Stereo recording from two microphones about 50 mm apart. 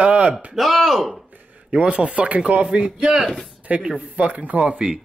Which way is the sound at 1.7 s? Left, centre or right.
Right.